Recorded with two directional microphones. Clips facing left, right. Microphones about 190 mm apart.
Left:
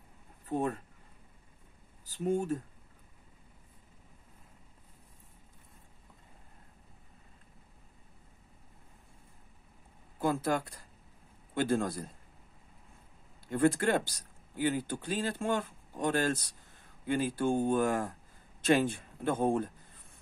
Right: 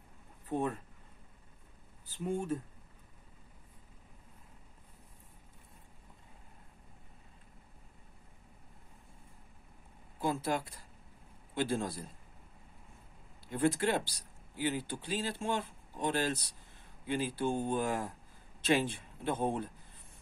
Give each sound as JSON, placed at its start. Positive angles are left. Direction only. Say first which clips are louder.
{"t": 0.5, "sound": "speech", "louder": "left 2 dB", "side_deg": 40}
{"t": 2.0, "sound": "speech", "louder": "left 4 dB", "side_deg": 40}
{"t": 10.2, "sound": "speech", "louder": "left 3 dB", "side_deg": 50}
{"t": 13.5, "sound": "speech", "louder": "left 3 dB", "side_deg": 50}